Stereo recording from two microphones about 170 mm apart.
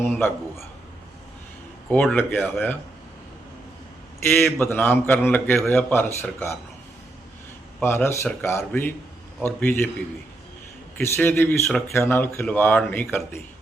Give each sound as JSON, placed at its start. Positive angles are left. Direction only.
{"t": 0.0, "sound": "speech", "side_deg": 10}
{"t": 1.9, "sound": "speech", "side_deg": 5}
{"t": 4.3, "sound": "speech", "side_deg": 10}
{"t": 7.8, "sound": "speech", "side_deg": 15}
{"t": 11.0, "sound": "speech", "side_deg": 15}